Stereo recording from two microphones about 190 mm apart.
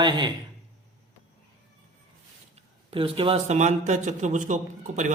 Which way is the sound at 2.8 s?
30° right (ahead or behind).